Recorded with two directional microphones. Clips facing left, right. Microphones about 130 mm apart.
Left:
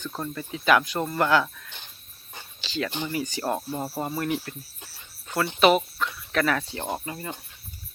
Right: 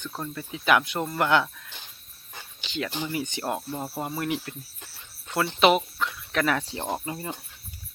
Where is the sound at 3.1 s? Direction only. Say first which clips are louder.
Left 1 dB; 25° right (ahead or behind).